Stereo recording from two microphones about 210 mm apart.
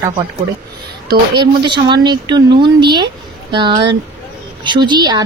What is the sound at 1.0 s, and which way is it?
Speech, 20° right (ahead or behind).